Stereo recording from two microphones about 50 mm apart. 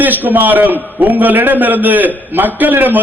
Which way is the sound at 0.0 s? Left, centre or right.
Right.